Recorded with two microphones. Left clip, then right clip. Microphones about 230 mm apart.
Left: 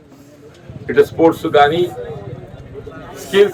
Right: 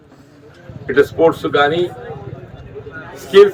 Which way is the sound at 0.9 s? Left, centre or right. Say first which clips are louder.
Even; right.